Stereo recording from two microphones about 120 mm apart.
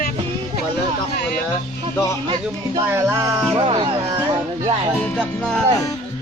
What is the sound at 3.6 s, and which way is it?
Music, 40° right (ahead or behind).